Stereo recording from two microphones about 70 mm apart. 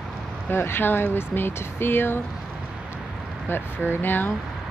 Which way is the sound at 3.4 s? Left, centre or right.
Left.